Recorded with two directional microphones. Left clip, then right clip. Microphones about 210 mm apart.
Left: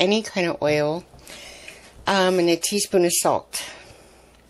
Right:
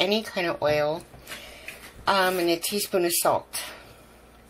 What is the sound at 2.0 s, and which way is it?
Speech, 45° left (ahead or behind).